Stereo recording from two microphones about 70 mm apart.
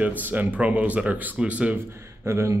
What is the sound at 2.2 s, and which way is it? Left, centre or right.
Speech, right.